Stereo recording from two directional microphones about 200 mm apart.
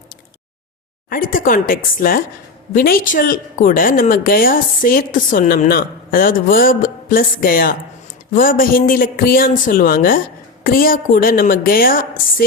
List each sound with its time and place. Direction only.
1.1 s a woman's voice: 45° left (ahead or behind)